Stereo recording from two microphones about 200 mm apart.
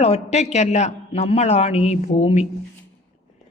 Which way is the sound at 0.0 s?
35° left (ahead or behind).